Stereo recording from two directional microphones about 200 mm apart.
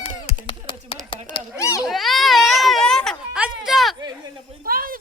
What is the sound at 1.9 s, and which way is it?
Baby cry, centre (ahead or behind).